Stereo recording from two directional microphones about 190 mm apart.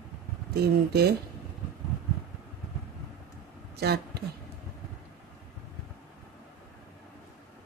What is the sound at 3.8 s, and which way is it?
Speech, 60° right (ahead or behind).